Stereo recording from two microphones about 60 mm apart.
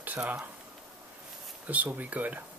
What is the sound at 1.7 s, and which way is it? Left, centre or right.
Speech, right.